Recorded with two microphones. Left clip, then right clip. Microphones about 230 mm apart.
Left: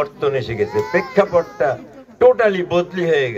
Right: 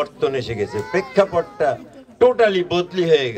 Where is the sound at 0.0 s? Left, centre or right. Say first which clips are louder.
Left 2 dB; right.